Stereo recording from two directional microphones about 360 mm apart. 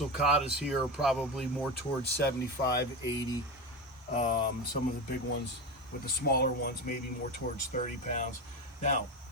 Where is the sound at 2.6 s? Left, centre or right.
Left.